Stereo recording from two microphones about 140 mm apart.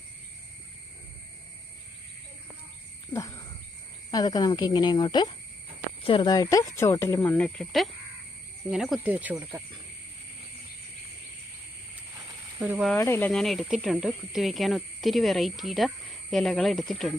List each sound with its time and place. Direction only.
3.1 s speech: 25° left (ahead or behind); by 9.1 s centre (ahead or behind)
9.1 s speech: 10° right (ahead or behind)
12.7 s speech: centre (ahead or behind)
13.0 s speech: 15° left (ahead or behind)
13.3 s speech: centre (ahead or behind)